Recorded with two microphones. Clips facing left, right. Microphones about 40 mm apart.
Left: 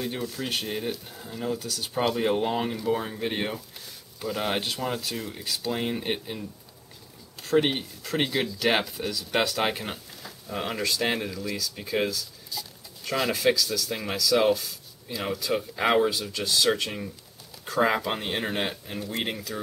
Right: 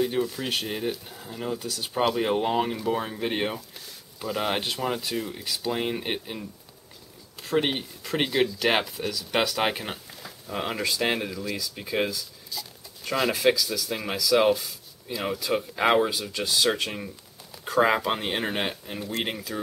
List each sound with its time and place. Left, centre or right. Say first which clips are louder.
0.0 s speech: right 5 dB; centre
7.4 s speech: left 2 dB; centre
12.4 s a sound: even; centre
13.4 s speech: right 1 dB; centre